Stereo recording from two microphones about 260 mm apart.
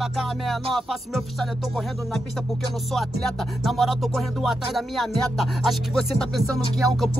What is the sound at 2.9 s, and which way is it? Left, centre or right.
Speech, centre.